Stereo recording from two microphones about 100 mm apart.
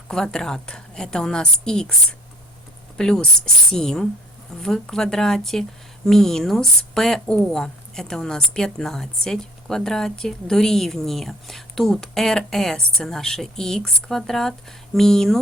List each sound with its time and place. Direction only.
0.1 s a woman's voice: 5° left (ahead or behind)
3.0 s a woman's voice: 5° left (ahead or behind)